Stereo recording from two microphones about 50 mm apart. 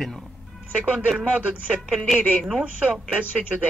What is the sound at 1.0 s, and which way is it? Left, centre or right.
Speech, right.